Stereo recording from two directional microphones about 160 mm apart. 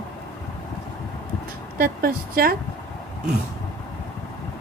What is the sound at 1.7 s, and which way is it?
Speech, 65° right (ahead or behind).